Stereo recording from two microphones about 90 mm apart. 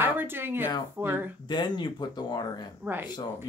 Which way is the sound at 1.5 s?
55° left (ahead or behind).